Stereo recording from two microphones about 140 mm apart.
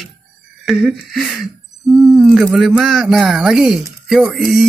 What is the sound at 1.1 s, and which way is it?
Speech, centre (ahead or behind).